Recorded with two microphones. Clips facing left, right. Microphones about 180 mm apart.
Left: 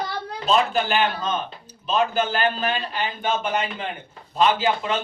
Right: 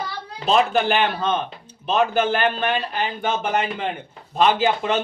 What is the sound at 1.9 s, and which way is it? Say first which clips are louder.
Speech: right 3 dB; 65° right (ahead or behind).